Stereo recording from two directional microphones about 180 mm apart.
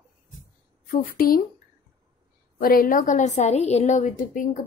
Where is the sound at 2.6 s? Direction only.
50° left (ahead or behind).